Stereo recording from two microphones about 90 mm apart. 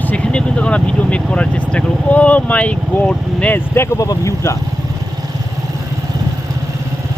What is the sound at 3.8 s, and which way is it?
Speech, 35° left (ahead or behind).